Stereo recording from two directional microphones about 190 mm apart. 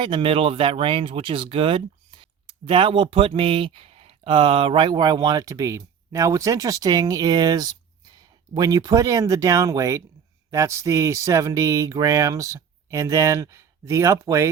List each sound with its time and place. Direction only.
0.0 s speech: 25° right (ahead or behind)